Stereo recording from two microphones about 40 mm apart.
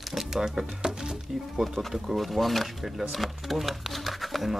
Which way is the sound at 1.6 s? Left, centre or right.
Centre.